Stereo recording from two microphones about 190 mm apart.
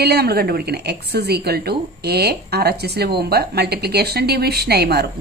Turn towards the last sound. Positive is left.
turn(degrees=-60)  # may be behind; listen again after turning